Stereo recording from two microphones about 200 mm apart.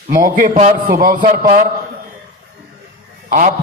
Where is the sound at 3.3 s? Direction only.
40° right (ahead or behind).